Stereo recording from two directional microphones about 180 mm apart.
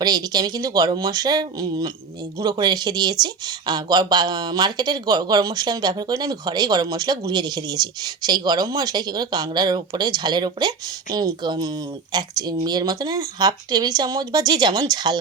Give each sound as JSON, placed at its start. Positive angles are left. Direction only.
{"t": 0.0, "sound": "speech", "side_deg": -20}